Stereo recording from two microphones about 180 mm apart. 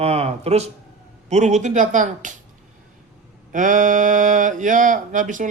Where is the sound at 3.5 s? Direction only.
45° right (ahead or behind).